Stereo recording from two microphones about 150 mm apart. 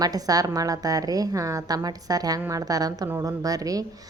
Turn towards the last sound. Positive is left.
turn(degrees=-25)  # may be behind; listen again after turning